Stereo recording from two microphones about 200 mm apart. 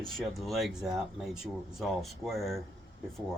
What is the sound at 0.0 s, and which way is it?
Speech, centre (ahead or behind).